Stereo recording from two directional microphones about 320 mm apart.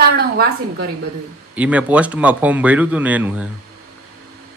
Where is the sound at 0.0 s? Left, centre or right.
Right.